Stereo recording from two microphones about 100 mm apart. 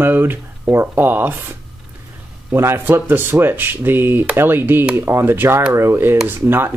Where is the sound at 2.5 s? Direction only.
25° right (ahead or behind).